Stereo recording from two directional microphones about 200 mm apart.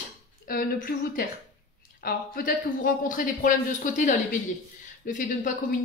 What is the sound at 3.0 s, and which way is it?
Speech, 40° left (ahead or behind).